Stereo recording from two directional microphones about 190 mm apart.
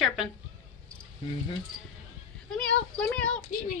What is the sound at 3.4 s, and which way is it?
Speech, 45° left (ahead or behind).